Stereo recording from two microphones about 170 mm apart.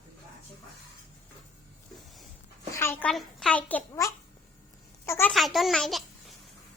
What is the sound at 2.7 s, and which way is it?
Babbling, 15° left (ahead or behind).